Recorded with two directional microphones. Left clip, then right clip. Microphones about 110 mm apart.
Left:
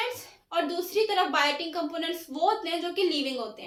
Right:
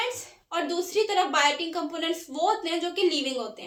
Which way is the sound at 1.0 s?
45° right (ahead or behind).